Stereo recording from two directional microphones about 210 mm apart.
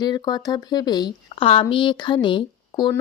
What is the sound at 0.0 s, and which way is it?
Speech, 20° left (ahead or behind).